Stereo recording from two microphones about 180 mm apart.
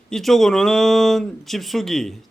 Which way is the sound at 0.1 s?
Centre (ahead or behind).